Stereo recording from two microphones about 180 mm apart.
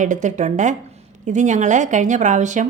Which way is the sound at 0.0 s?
45° right (ahead or behind).